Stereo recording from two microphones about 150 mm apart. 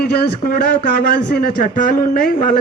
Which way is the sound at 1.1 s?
85° left.